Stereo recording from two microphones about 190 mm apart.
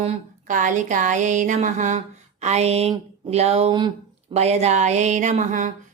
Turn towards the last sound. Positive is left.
turn(degrees=-40)  # may be behind; listen again after turning